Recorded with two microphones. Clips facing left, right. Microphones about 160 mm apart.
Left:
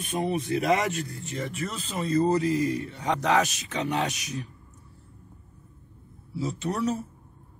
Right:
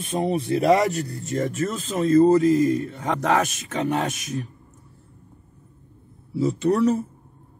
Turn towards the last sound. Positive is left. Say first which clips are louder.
# right 8 dB
turn(degrees=-55)  # may be behind; listen again after turning